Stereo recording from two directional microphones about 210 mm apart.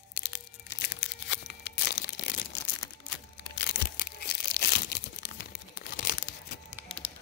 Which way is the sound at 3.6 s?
55° left (ahead or behind).